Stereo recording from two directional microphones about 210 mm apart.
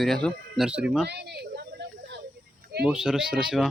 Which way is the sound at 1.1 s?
50° right (ahead or behind).